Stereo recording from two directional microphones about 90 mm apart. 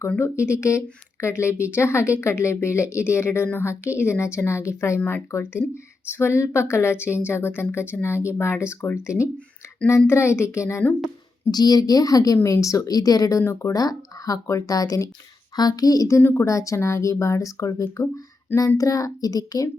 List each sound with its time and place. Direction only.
0.2 s a woman's voice: 30° left (ahead or behind)
11.5 s a woman's voice: 45° left (ahead or behind)
16.2 s speech: 20° left (ahead or behind)
16.5 s a woman's voice: 35° left (ahead or behind)